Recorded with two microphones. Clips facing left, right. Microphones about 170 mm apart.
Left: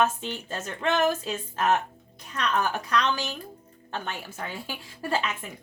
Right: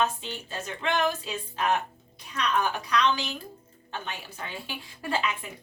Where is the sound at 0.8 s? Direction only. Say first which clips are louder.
Left 3 dB; 45° left (ahead or behind).